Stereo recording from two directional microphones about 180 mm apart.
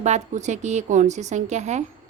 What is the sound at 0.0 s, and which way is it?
A woman's voice, 40° right (ahead or behind).